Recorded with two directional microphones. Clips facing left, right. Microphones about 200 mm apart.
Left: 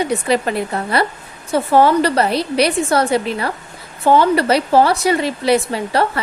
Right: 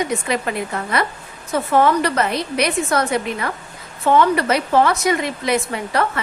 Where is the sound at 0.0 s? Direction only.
35° left (ahead or behind).